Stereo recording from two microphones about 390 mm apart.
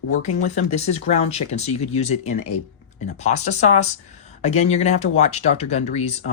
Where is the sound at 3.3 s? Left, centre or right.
Centre.